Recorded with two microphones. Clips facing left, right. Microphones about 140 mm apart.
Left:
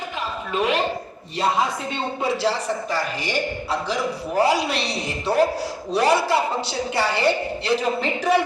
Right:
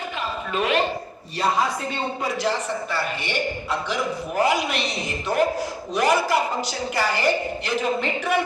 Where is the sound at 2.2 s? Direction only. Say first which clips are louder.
Left 4 dB; 30° left (ahead or behind).